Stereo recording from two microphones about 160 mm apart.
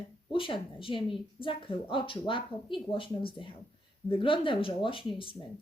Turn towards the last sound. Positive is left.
turn(degrees=35)  # may be behind; listen again after turning